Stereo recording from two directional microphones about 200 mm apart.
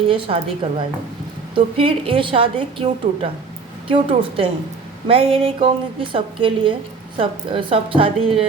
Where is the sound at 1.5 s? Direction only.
25° right (ahead or behind).